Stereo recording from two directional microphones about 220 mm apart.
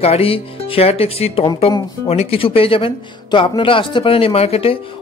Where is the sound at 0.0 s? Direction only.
25° left (ahead or behind).